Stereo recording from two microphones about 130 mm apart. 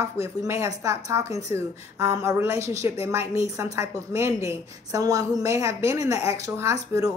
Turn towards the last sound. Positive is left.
turn(degrees=-25)  # may be behind; listen again after turning